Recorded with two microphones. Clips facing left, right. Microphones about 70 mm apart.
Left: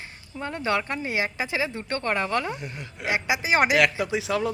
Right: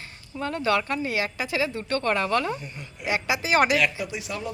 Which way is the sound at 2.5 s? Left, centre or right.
Left.